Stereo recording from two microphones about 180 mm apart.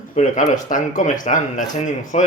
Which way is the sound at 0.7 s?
45° left (ahead or behind).